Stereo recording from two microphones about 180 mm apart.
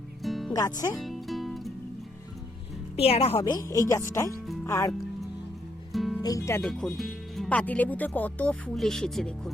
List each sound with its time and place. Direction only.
0.2 s music: centre (ahead or behind)
0.5 s a woman's voice: 20° left (ahead or behind)
1.0 s music: centre (ahead or behind)
2.9 s a woman's voice: 35° left (ahead or behind); by 4.9 s 15° left (ahead or behind)
5.9 s music: centre (ahead or behind)
6.2 s speech: 15° left (ahead or behind)
6.6 s speech: centre (ahead or behind)